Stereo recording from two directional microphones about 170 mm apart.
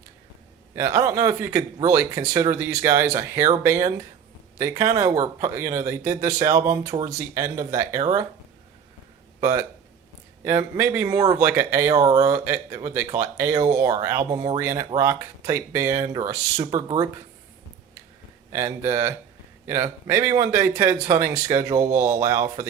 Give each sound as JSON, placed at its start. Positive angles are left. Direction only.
{"t": 0.8, "sound": "a man's voice", "side_deg": -15}
{"t": 9.4, "sound": "a man's voice", "side_deg": -20}
{"t": 18.5, "sound": "a man's voice", "side_deg": -15}